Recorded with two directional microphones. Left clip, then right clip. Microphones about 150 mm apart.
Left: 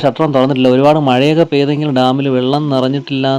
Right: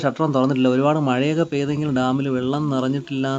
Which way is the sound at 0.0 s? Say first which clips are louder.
Left 8 dB; 20° left (ahead or behind).